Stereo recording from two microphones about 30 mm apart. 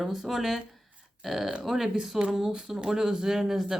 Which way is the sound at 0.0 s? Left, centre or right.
Centre.